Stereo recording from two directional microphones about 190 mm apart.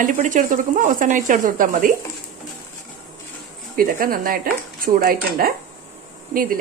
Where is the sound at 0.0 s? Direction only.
40° right (ahead or behind).